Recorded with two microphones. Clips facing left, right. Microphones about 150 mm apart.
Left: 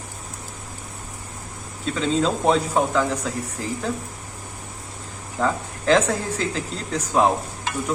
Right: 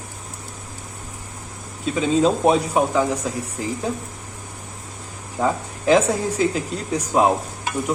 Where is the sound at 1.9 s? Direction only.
15° right (ahead or behind).